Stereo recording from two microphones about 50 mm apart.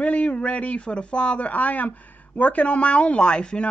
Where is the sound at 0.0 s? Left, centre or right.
Left.